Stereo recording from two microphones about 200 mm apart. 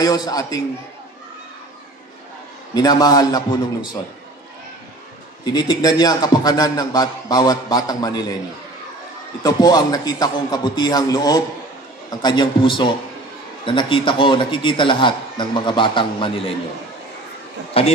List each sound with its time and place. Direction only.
0.0 s a man's voice: 20° left (ahead or behind)
2.7 s a man's voice: 20° left (ahead or behind)
5.4 s a man's voice: 20° left (ahead or behind)
9.4 s a man's voice: 20° left (ahead or behind)
17.8 s a man's voice: 30° left (ahead or behind)